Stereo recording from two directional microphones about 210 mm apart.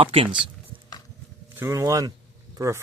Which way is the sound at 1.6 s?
15° right (ahead or behind).